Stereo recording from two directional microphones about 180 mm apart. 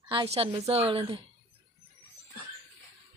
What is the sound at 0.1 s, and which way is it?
A woman's voice, 30° right (ahead or behind).